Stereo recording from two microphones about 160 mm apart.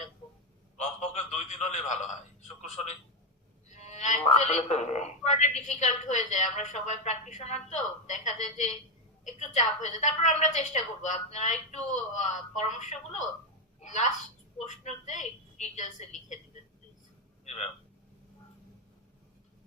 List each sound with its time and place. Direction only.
0.8 s a woman's voice: 45° left (ahead or behind)
3.7 s frog: 45° left (ahead or behind)
4.4 s a woman's voice: 45° left (ahead or behind)
17.4 s a sound: 45° left (ahead or behind)